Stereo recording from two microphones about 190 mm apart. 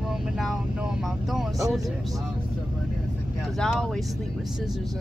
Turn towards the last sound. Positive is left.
turn(degrees=5)  # may be behind; listen again after turning